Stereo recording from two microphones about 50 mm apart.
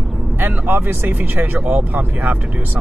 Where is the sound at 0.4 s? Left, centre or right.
Right.